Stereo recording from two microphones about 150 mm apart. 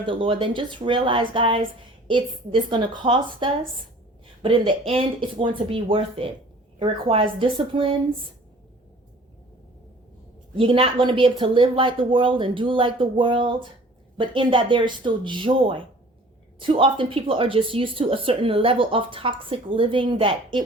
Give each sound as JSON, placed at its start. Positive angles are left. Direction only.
{"t": 0.0, "sound": "a woman's voice", "side_deg": -35}
{"t": 10.5, "sound": "a woman's voice", "side_deg": -35}